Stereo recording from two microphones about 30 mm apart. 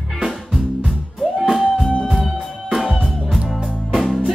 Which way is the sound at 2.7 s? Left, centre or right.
Centre.